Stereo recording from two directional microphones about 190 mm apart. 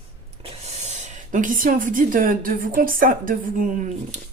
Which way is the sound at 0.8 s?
35° right (ahead or behind).